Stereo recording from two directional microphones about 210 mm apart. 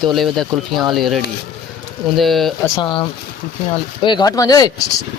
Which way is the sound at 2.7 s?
20° left (ahead or behind).